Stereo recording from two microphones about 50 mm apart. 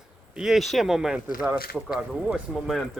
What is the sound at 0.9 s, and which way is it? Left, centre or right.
Speech, centre.